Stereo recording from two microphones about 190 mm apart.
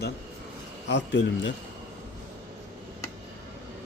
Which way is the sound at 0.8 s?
70° left (ahead or behind).